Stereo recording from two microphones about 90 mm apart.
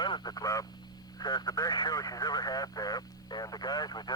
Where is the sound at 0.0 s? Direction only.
55° left (ahead or behind).